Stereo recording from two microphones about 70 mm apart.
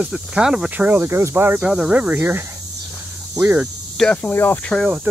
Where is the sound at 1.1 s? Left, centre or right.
Right.